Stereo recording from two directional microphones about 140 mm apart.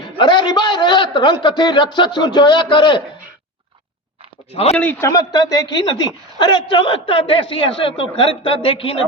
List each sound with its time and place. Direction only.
0.2 s a man's voice: 35° left (ahead or behind)
4.5 s a man's voice: 45° left (ahead or behind)
4.8 s a man's voice: 15° left (ahead or behind); by 9.0 s 40° left (ahead or behind)